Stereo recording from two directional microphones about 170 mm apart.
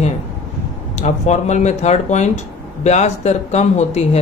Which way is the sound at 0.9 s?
40° left (ahead or behind).